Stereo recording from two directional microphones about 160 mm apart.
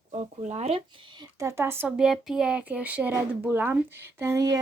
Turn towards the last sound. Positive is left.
turn(degrees=-20)  # may be behind; listen again after turning